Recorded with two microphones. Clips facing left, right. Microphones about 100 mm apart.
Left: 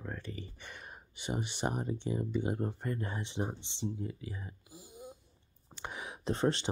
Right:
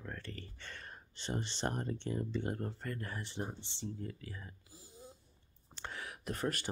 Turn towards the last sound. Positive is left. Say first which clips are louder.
# left 7 dB
turn(degrees=25)  # may be behind; listen again after turning